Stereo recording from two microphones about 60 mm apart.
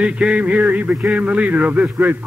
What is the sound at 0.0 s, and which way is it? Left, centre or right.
A man's voice, centre.